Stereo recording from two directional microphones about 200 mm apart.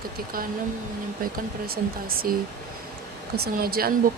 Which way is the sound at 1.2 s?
45° right (ahead or behind).